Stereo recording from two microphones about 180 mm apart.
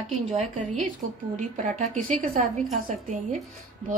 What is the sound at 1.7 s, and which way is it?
A woman's voice, 45° right (ahead or behind).